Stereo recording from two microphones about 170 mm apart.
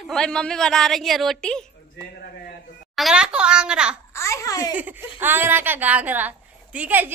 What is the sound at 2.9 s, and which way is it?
A child's voice, 5° right (ahead or behind).